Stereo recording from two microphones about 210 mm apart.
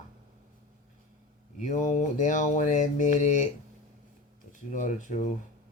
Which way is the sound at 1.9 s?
35° left (ahead or behind).